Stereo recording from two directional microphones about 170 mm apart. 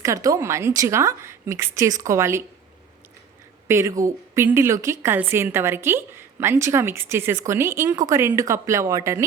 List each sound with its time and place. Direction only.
0.0 s a woman's voice: 20° right (ahead or behind)
3.7 s a woman's voice: 15° right (ahead or behind)